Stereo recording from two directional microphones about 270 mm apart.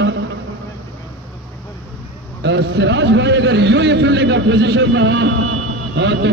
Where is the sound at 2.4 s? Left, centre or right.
Right.